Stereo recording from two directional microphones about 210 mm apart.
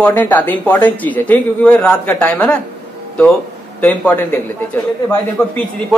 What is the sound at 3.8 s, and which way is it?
Speech, 5° left (ahead or behind).